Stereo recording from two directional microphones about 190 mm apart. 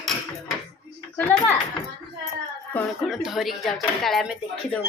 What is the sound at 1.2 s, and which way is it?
Speech, 10° left (ahead or behind).